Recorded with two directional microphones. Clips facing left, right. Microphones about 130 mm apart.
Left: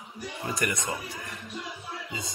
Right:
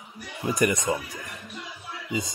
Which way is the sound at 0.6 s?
20° right (ahead or behind).